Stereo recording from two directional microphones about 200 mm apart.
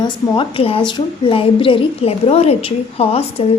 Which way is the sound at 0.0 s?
25° left (ahead or behind).